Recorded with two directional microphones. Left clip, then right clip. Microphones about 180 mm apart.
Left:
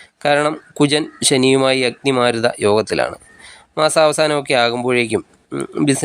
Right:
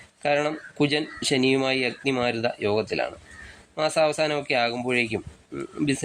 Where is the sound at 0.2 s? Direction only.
35° left (ahead or behind).